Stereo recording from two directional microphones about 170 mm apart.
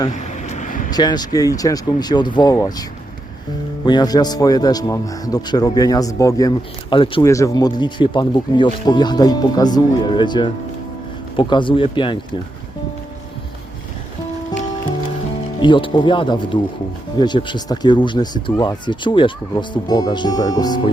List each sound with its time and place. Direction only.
0.1 s vehicle: 45° left (ahead or behind)
0.9 s speech: 25° left (ahead or behind)
3.8 s speech: 25° left (ahead or behind)
7.3 s speech: 20° left (ahead or behind)
15.6 s speech: 30° left (ahead or behind)